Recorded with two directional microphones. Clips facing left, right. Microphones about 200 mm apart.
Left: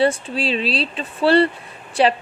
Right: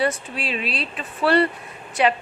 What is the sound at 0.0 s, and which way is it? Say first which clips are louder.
A woman's voice: left 5 dB; 30° left (ahead or behind).